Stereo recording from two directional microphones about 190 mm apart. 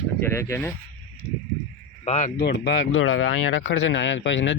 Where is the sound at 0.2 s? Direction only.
15° left (ahead or behind).